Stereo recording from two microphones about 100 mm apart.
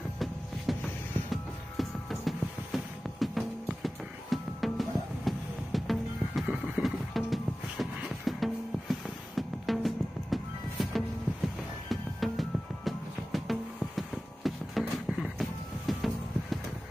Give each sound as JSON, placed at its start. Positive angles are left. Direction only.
{"t": 0.7, "sound": "vehicle", "side_deg": 0}
{"t": 1.3, "sound": "music", "side_deg": 0}
{"t": 6.4, "sound": "horse", "side_deg": -10}
{"t": 8.3, "sound": "music", "side_deg": 0}